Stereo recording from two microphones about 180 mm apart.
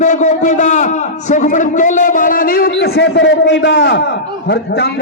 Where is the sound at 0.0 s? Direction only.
40° left (ahead or behind).